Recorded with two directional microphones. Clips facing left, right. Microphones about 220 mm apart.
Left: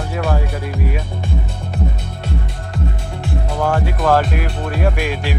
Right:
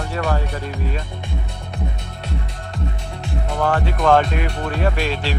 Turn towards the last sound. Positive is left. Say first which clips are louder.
# left 1 dB
turn(degrees=10)  # may be behind; listen again after turning